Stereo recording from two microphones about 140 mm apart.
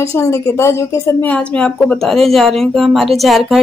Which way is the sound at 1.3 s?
10° left (ahead or behind).